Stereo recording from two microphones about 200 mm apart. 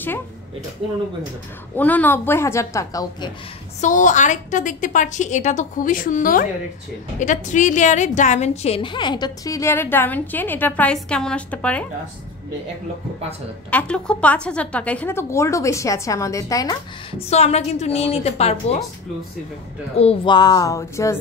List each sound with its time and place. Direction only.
1.8 s a woman's voice: 10° left (ahead or behind)
3.8 s a woman's voice: 40° left (ahead or behind); by 11.8 s 5° left (ahead or behind)
13.7 s a woman's voice: 5° left (ahead or behind)
17.3 s a woman's voice: 35° left (ahead or behind)
20.0 s speech: 25° left (ahead or behind)